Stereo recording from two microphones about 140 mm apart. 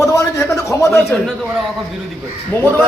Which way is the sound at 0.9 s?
5° left (ahead or behind).